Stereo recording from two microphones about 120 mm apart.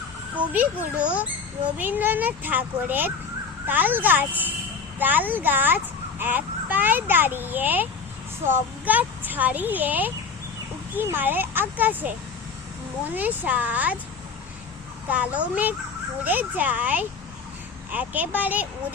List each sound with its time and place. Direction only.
0.5 s speech: 10° right (ahead or behind)
13.1 s speech: 15° right (ahead or behind)
15.1 s speech: 10° right (ahead or behind)